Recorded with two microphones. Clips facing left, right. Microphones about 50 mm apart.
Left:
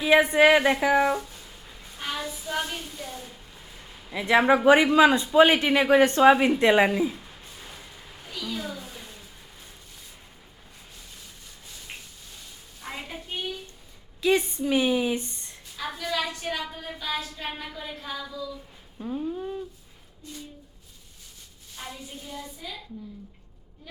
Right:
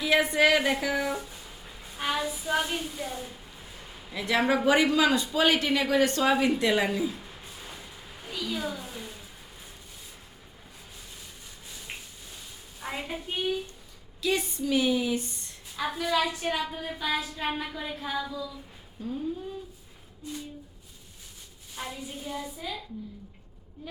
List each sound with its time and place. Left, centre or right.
0.0 s speech: left
1.1 s music: centre
4.1 s speech: left
7.2 s a sound: centre
11.7 s a sound: centre
12.8 s hands: centre
13.2 s a woman's voice: centre
14.2 s speech: left
15.7 s a woman's voice: centre
18.9 s speech: left
20.2 s a woman's voice: centre
21.8 s a woman's voice: centre